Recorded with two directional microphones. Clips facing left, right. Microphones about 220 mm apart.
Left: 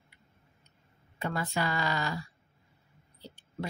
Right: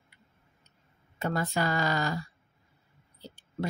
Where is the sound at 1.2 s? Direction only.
45° right (ahead or behind).